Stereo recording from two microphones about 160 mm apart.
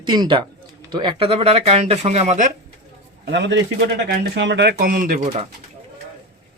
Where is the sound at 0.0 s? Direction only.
30° right (ahead or behind); by 2.5 s 45° right (ahead or behind).